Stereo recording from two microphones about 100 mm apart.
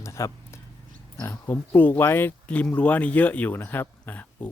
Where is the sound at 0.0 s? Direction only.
30° left (ahead or behind).